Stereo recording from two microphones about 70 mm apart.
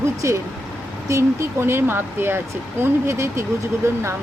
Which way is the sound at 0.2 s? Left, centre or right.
Right.